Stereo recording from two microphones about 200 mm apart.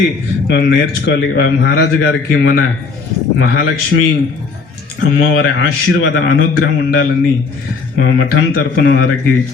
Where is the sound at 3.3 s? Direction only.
50° left (ahead or behind).